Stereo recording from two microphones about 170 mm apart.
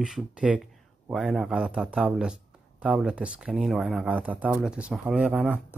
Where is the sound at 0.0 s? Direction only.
5° right (ahead or behind).